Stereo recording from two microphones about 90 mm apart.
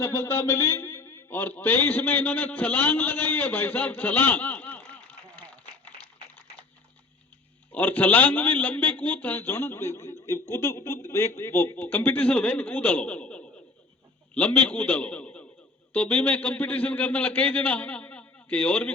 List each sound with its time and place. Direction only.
0.0 s a man's voice: 25° left (ahead or behind)
7.7 s a man's voice: 20° left (ahead or behind)